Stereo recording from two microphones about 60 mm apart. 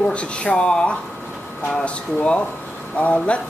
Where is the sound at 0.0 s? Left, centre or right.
Centre.